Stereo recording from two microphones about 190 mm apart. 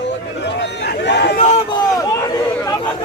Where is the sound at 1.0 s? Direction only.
65° left (ahead or behind).